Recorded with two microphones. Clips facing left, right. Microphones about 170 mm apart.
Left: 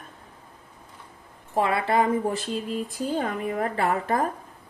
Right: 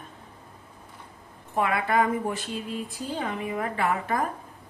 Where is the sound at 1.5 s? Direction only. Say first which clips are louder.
Left 2 dB; 30° left (ahead or behind).